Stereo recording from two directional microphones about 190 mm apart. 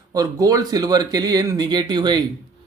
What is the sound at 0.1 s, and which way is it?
Speech, 20° right (ahead or behind).